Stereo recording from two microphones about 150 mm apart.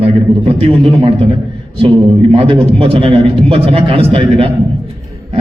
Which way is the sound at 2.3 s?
40° right (ahead or behind).